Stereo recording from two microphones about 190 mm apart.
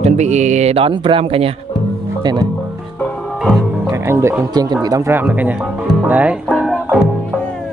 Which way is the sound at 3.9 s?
15° right (ahead or behind).